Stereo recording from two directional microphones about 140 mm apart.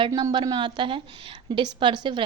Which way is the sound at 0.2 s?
30° right (ahead or behind).